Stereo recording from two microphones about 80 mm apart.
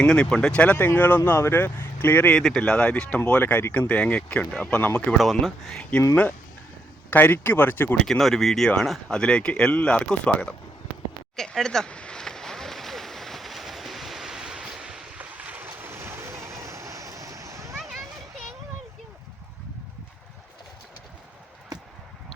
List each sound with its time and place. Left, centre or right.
0.0 s speech: centre
2.4 s speech: centre
5.1 s speech: centre
7.1 s speech: left
7.9 s speech: centre
11.3 s a sound: centre; by 17.7 s right
17.7 s a sound: centre